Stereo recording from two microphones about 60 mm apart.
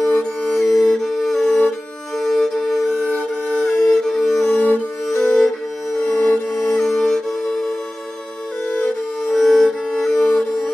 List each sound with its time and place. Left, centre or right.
0.0 s music: centre
4.6 s music: left
5.0 s music: centre
6.0 s music: centre
9.3 s music: centre